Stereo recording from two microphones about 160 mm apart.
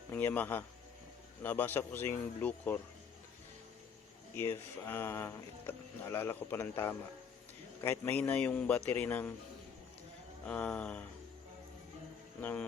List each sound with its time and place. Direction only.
0.1 s speech: 10° left (ahead or behind)
4.4 s speech: 15° left (ahead or behind)
10.4 s speech: 10° left (ahead or behind)
12.4 s speech: 10° left (ahead or behind)